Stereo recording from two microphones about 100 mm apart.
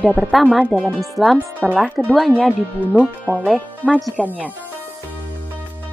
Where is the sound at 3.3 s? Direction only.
15° left (ahead or behind).